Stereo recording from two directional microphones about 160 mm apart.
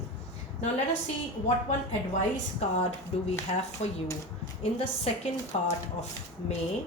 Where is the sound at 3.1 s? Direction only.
40° left (ahead or behind).